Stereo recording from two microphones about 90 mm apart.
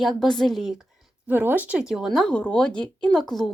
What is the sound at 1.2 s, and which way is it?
Speech, 20° right (ahead or behind).